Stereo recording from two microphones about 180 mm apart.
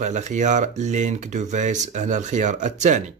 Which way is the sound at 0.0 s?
40° right (ahead or behind).